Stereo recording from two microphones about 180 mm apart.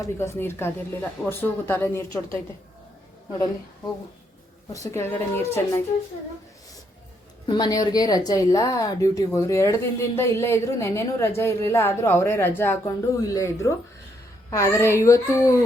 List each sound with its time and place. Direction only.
0.0 s a woman's voice: 15° left (ahead or behind)
4.7 s a woman's voice: 15° left (ahead or behind)
7.4 s a woman's voice: 25° left (ahead or behind)